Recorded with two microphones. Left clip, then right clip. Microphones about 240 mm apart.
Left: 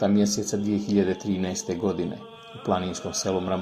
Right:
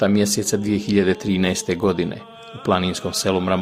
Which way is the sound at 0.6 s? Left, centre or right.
Right.